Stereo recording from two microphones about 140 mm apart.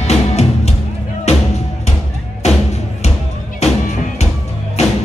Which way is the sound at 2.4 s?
50° left (ahead or behind).